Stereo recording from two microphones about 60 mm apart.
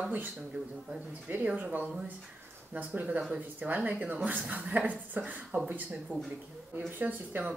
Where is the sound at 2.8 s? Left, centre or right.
Right.